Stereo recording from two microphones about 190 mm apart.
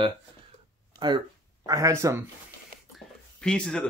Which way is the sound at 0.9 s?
25° right (ahead or behind).